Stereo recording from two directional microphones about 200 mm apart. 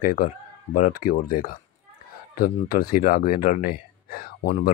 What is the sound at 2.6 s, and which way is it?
Speech, 45° left (ahead or behind).